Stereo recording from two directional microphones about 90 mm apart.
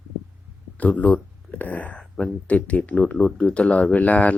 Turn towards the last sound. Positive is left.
turn(degrees=15)  # may be behind; listen again after turning